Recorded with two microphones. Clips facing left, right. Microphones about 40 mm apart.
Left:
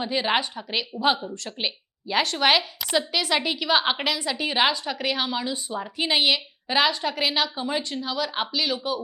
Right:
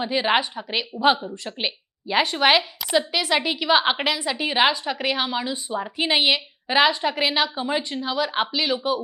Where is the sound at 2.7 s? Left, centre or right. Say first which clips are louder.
Right 2 dB; centre.